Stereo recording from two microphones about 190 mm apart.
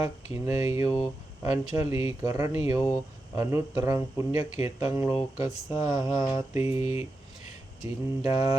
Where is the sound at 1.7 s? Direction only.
15° right (ahead or behind).